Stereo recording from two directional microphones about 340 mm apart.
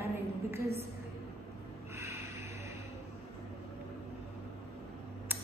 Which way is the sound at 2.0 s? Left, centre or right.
Centre.